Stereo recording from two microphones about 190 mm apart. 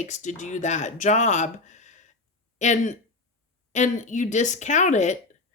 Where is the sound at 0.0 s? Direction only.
40° left (ahead or behind).